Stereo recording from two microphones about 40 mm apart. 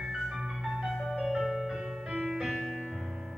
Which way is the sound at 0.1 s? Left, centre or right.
Centre.